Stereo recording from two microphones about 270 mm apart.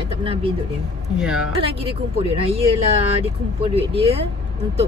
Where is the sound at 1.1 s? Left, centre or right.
Centre.